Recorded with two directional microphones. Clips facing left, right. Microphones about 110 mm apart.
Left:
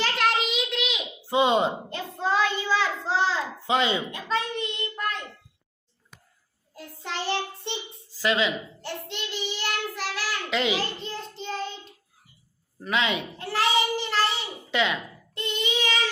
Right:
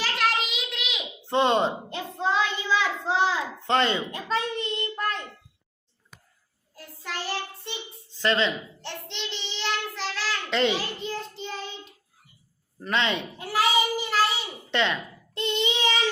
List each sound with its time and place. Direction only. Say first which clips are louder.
0.0 s a sound: left 2 dB; centre (ahead or behind)
1.9 s child singing: even; 20° right (ahead or behind)
2.7 s a sound: right 3 dB; 15° right (ahead or behind)
3.7 s a man's voice: right 1 dB; 5° left (ahead or behind)
4.1 s a sound: even; 35° right (ahead or behind)
6.7 s child singing: left 2 dB; 20° left (ahead or behind)
8.1 s a child's voice: even; 5° left (ahead or behind)
12.8 s a man's voice: even; 5° left (ahead or behind)
13.4 s child singing: right 1 dB; 10° right (ahead or behind)
14.7 s speech: even; 5° left (ahead or behind)
15.4 s child singing: right 2 dB; 20° right (ahead or behind)